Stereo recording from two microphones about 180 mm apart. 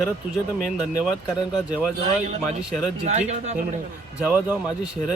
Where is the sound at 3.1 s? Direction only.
35° right (ahead or behind).